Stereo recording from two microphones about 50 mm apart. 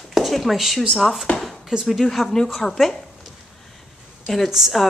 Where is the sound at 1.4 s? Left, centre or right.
Centre.